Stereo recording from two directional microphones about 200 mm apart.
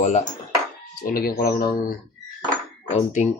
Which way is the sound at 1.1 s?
50° left (ahead or behind).